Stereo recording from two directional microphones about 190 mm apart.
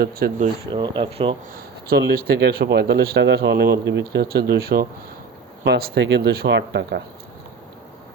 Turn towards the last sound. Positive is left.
turn(degrees=-65)  # may be behind; listen again after turning